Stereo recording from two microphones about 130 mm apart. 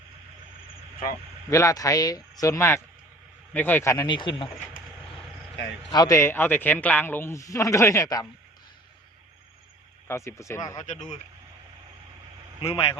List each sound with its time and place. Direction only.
1.5 s a man's voice: 25° left (ahead or behind)
3.9 s speech: 35° left (ahead or behind)
5.9 s a man's voice: 30° left (ahead or behind)
10.1 s a man's voice: 20° left (ahead or behind)
10.8 s speech: 65° left (ahead or behind)
12.6 s speech: 45° left (ahead or behind)